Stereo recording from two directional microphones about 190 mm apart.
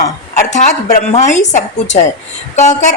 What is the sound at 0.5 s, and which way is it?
A woman's voice, 40° left (ahead or behind).